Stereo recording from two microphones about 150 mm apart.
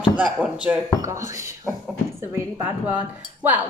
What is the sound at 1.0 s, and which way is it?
A woman's voice, 20° right (ahead or behind).